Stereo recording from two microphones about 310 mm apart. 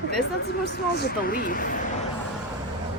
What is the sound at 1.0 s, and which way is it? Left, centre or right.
Speech, left.